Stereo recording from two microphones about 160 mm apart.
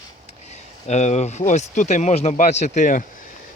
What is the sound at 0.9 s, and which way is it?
Speech, 45° left (ahead or behind).